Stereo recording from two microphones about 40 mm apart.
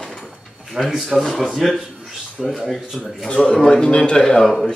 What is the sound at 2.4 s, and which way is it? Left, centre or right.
Speech, centre.